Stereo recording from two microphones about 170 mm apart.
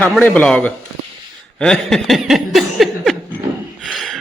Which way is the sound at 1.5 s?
5° left (ahead or behind).